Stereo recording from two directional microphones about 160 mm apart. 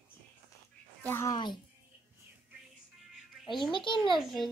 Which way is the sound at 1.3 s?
30° left (ahead or behind).